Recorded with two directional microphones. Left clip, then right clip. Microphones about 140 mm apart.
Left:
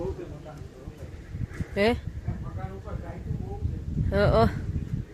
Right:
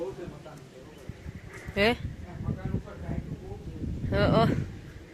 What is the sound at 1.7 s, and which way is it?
Speech, 20° left (ahead or behind).